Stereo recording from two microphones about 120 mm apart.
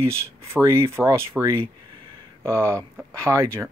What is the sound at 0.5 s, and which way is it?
Speech, 25° right (ahead or behind).